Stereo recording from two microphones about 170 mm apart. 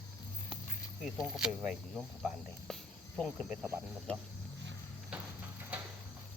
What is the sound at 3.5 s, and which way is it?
Speech, 5° right (ahead or behind).